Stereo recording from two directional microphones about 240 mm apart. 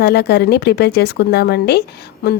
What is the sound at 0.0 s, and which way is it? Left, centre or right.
Speech, left.